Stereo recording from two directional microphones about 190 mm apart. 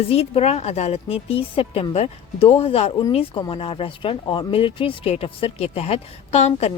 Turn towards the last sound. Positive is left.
turn(degrees=35)  # may be behind; listen again after turning